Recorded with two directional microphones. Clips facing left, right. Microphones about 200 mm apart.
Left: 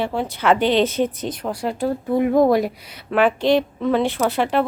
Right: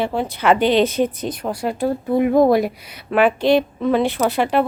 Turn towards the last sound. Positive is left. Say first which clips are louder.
# right 2 dB
turn(degrees=-10)  # may be behind; listen again after turning